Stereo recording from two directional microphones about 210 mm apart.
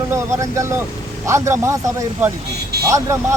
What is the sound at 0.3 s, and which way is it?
Speech, 15° right (ahead or behind).